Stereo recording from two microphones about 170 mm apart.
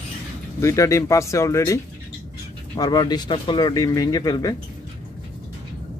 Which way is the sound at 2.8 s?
25° left (ahead or behind).